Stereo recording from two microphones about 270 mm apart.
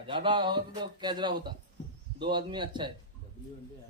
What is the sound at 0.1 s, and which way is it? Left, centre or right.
A man's voice, centre.